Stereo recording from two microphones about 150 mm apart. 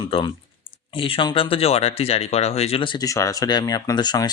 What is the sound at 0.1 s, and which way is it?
A man's voice, 35° left (ahead or behind).